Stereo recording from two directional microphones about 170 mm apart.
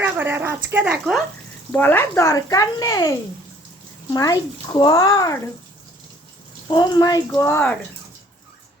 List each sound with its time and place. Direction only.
0.0 s speech: 10° right (ahead or behind)
1.7 s speech: 10° left (ahead or behind)
6.7 s speech: 25° left (ahead or behind); by 7.8 s 10° left (ahead or behind)